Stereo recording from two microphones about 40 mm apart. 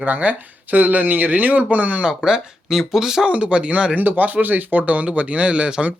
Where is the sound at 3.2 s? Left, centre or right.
Right.